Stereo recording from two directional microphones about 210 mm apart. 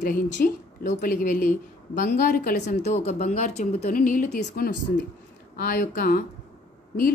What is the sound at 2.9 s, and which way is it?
Speech, 35° left (ahead or behind).